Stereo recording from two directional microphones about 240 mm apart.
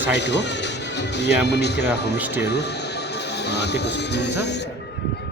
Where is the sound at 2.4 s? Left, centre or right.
Left.